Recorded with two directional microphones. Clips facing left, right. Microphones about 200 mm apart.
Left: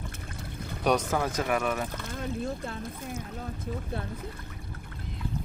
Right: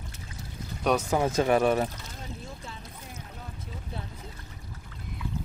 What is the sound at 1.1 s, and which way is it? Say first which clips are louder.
Speech: right 4 dB; 25° right (ahead or behind).